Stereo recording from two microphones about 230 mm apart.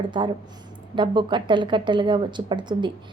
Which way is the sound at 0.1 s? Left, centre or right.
Right.